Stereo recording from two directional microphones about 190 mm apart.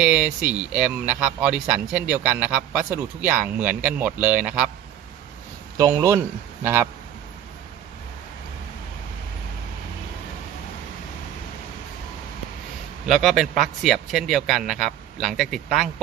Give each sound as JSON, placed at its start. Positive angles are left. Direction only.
{"t": 0.0, "sound": "speech", "side_deg": -5}
{"t": 5.7, "sound": "speech", "side_deg": -15}
{"t": 13.1, "sound": "a man's voice", "side_deg": 0}